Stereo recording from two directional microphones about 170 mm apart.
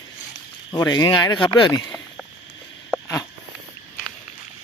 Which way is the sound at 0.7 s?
25° left (ahead or behind).